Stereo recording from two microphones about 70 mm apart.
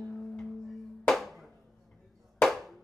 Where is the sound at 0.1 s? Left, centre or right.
Centre.